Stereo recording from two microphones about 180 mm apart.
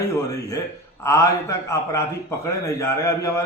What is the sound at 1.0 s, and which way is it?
A man's voice, 15° left (ahead or behind).